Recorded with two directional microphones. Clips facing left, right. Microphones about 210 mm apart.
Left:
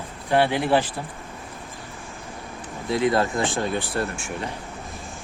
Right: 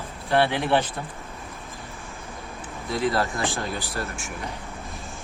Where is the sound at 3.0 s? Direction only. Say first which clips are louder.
Left 3 dB; 20° left (ahead or behind).